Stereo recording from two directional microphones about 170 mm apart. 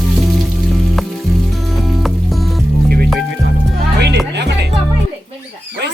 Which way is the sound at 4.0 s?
85° right.